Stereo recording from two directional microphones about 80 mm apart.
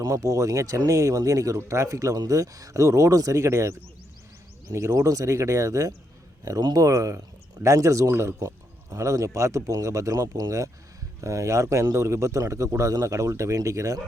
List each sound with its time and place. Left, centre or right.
0.0 s speech: right